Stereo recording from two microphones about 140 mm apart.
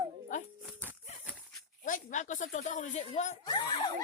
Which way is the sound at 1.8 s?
65° left (ahead or behind).